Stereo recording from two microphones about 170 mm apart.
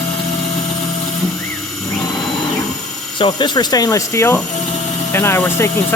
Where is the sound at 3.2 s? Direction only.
25° left (ahead or behind).